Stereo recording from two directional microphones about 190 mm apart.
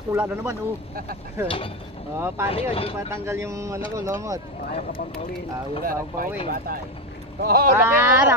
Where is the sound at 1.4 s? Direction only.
30° left (ahead or behind).